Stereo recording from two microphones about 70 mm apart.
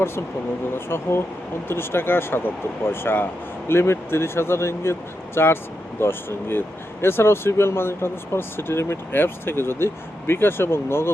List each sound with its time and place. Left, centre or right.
0.7 s speech: left